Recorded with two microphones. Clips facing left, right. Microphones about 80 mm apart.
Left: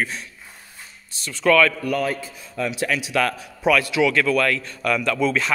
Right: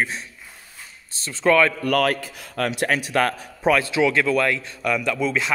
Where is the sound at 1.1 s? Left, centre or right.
Right.